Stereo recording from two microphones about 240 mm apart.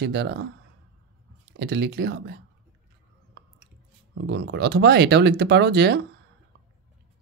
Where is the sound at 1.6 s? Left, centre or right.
Right.